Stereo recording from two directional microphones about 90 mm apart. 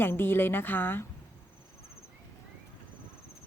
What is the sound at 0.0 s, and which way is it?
A woman's voice, 25° left (ahead or behind).